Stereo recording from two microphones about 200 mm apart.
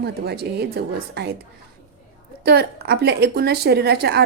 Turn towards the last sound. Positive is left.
turn(degrees=-55)  # may be behind; listen again after turning